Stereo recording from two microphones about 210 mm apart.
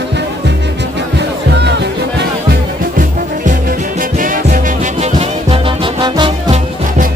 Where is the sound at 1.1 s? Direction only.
55° right (ahead or behind).